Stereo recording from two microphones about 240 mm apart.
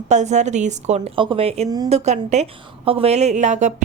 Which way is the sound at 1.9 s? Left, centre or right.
Right.